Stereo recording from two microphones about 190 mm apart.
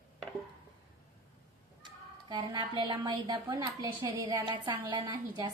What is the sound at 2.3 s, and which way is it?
A woman's voice, 25° right (ahead or behind).